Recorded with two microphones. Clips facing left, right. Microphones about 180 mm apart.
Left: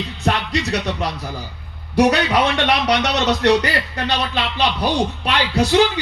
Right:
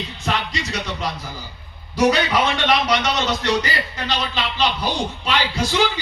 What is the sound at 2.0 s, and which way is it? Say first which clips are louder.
A man's voice: left 2 dB; 65° left (ahead or behind).